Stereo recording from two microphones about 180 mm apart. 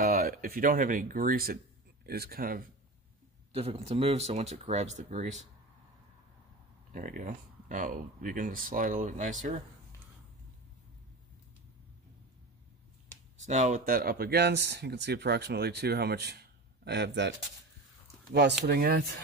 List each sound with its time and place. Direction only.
0.0 s speech: 55° right (ahead or behind)
3.5 s speech: 35° right (ahead or behind)
6.9 s speech: 50° right (ahead or behind)
13.4 s speech: 40° right (ahead or behind); by 17.4 s 80° right
18.7 s speech: 60° right (ahead or behind)